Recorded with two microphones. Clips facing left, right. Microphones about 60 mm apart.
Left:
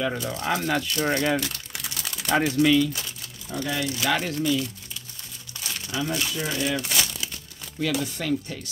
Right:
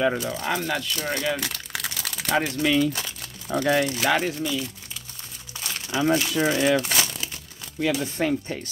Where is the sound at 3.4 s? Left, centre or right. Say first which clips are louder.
Right 7 dB; right.